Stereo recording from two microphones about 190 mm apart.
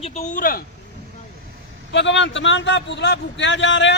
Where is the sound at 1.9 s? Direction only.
75° left (ahead or behind).